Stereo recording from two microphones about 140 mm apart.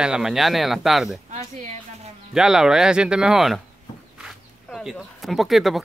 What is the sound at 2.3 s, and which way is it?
A man's voice, 5° right (ahead or behind).